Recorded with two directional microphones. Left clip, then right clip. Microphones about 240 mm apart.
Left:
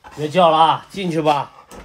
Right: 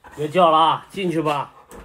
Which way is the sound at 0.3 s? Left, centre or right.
Left.